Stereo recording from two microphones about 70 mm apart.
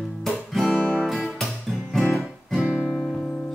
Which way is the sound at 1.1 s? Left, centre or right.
Centre.